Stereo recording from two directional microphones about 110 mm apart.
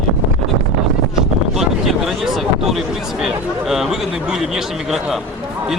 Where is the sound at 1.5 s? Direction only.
Centre (ahead or behind).